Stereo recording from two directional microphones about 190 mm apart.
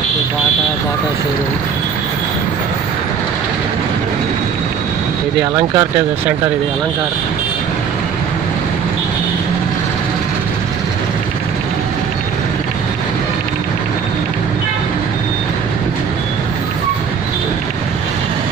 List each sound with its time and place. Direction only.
5.4 s speech: 20° right (ahead or behind)